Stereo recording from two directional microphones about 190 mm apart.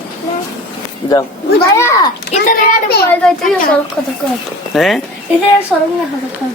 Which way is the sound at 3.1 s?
5° left (ahead or behind).